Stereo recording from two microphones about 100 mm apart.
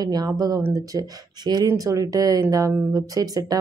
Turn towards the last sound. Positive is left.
turn(degrees=-35)  # may be behind; listen again after turning